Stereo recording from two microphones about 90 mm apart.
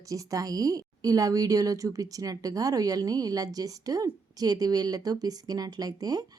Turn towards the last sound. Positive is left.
turn(degrees=-45)  # may be behind; listen again after turning